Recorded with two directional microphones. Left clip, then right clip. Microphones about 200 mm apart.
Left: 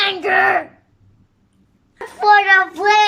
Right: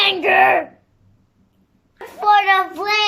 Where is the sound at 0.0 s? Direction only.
15° right (ahead or behind).